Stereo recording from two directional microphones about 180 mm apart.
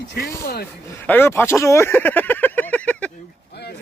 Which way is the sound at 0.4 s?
60° left (ahead or behind).